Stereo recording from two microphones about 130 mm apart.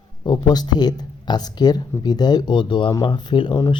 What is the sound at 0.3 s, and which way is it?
Speech, 30° left (ahead or behind).